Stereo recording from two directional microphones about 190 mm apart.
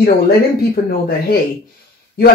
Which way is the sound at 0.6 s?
50° left (ahead or behind).